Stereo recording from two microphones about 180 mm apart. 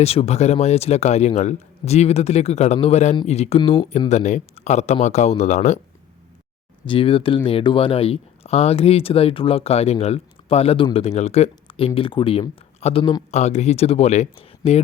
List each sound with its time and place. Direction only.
0.0 s speech: 35° left (ahead or behind)
6.8 s speech: 30° left (ahead or behind)